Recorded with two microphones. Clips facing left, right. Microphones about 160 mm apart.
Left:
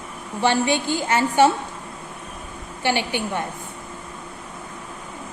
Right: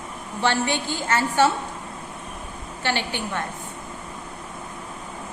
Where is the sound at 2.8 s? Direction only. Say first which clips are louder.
Left 4 dB; 15° left (ahead or behind).